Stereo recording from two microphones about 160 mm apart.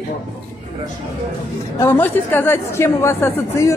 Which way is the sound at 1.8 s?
15° left (ahead or behind).